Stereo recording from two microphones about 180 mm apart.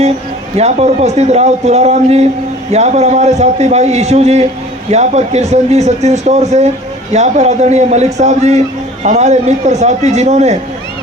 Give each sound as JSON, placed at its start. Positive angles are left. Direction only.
{"t": 0.5, "sound": "speech", "side_deg": -35}